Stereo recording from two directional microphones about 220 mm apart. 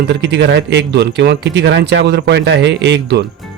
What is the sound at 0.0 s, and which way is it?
Speech, 50° right (ahead or behind).